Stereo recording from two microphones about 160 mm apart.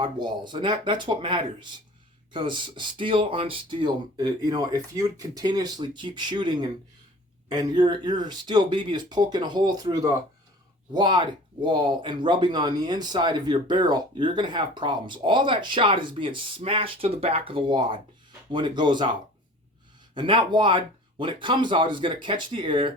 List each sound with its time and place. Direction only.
0.0 s speech: 30° right (ahead or behind)
20.1 s speech: 30° right (ahead or behind)